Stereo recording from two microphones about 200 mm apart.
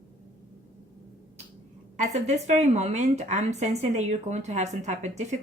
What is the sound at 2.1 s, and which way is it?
Speech, 35° right (ahead or behind).